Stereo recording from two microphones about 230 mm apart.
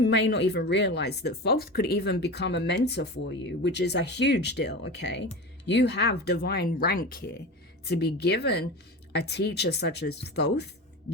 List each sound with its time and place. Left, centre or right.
0.0 s speech: left